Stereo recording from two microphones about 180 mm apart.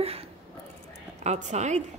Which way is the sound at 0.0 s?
35° right (ahead or behind).